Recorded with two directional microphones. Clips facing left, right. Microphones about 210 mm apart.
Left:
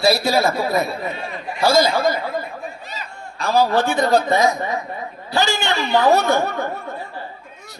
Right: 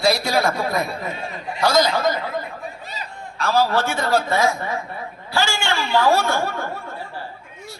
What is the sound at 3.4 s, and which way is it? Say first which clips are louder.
A man's voice: left 2 dB; 15° left (ahead or behind).